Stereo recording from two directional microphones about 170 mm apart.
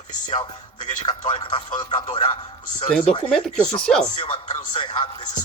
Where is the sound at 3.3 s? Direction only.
5° left (ahead or behind).